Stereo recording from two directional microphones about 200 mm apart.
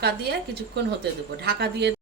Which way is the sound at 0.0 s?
55° right (ahead or behind).